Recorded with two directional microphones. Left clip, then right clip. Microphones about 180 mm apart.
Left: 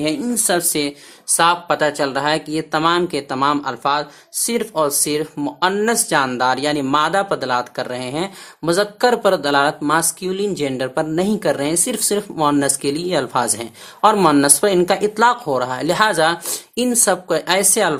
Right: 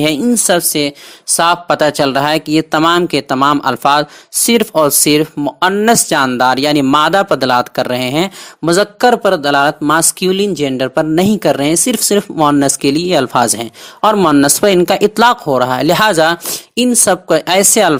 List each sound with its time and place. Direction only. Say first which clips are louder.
0.0 s speech: right 8 dB; 40° right (ahead or behind)